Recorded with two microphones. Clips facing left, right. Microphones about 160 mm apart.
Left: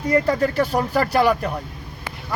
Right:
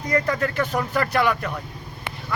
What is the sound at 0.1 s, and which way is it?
Speech, 35° left (ahead or behind).